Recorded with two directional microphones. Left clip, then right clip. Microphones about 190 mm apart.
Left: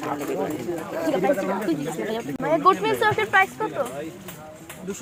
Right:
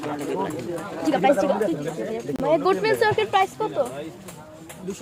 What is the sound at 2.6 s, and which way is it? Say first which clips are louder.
Speech: left 1 dB; 30° right (ahead or behind).